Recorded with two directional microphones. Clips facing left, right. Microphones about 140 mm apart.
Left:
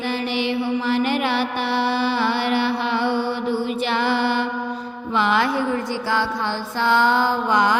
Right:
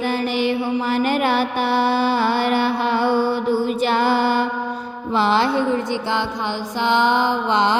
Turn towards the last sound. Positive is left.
turn(degrees=-25)  # may be behind; listen again after turning